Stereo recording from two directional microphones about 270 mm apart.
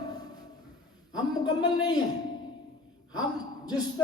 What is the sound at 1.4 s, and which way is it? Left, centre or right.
Speech, centre.